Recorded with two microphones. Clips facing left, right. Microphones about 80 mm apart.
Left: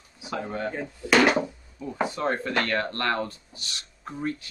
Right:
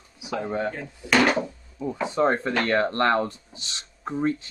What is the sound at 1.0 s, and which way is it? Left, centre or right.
Speech, centre.